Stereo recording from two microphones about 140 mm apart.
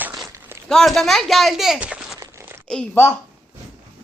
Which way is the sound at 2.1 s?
20° right (ahead or behind).